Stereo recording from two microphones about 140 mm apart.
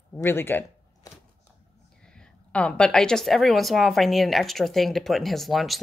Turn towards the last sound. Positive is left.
turn(degrees=0)  # may be behind; listen again after turning